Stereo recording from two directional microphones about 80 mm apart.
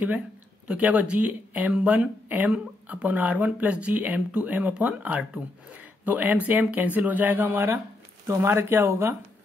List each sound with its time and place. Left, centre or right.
0.7 s speech: centre